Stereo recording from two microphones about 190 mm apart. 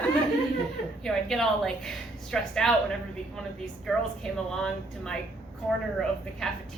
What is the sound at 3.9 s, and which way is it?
A woman's voice, centre (ahead or behind).